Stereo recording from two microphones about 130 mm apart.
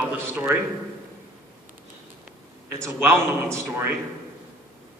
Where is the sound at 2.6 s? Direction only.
15° right (ahead or behind).